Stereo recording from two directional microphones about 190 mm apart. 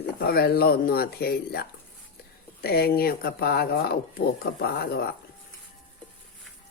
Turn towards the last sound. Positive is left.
turn(degrees=55)  # may be behind; listen again after turning